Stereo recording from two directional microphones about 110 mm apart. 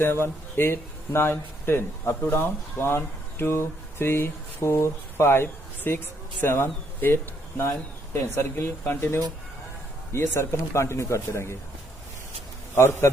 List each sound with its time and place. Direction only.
0.0 s speech: 20° left (ahead or behind)
12.7 s speech: 25° left (ahead or behind)